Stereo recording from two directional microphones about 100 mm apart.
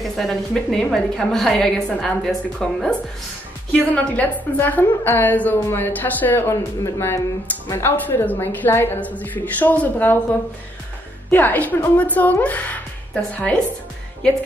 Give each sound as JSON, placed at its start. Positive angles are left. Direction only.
{"t": 0.0, "sound": "a woman's voice", "side_deg": 0}
{"t": 3.9, "sound": "a woman's voice", "side_deg": 15}
{"t": 11.2, "sound": "a woman's voice", "side_deg": 15}